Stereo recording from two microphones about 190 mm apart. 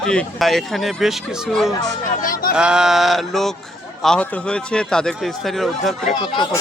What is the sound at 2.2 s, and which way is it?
Speech, 45° left (ahead or behind).